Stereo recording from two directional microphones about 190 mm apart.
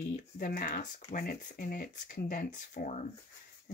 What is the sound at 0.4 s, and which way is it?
Speech, 45° left (ahead or behind).